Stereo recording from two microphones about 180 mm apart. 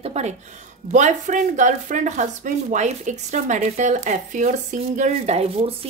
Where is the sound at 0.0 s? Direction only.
35° right (ahead or behind).